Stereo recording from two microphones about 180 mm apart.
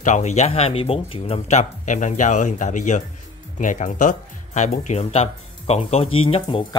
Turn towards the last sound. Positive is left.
turn(degrees=25)  # may be behind; listen again after turning